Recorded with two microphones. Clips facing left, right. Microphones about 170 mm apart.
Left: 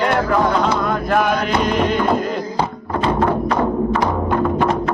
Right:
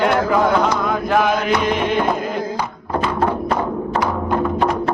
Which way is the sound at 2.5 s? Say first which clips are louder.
Left 1 dB; 30° left (ahead or behind).